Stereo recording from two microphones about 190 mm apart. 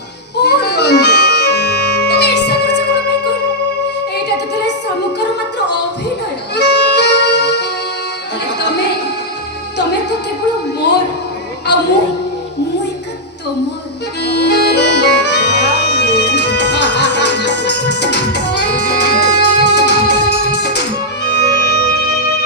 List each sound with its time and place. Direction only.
0.4 s accordion: 60° left (ahead or behind)
6.6 s music: 65° left (ahead or behind)
14.3 s music: 60° left (ahead or behind)
21.6 s music: 50° left (ahead or behind)